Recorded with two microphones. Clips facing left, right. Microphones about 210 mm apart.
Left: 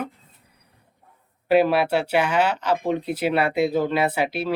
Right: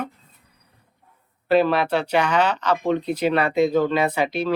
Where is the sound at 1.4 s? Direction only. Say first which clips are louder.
Even; 10° left (ahead or behind).